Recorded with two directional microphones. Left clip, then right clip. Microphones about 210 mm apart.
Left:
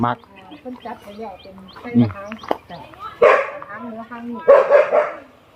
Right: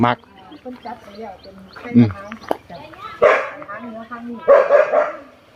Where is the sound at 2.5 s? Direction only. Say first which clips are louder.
Even; centre (ahead or behind).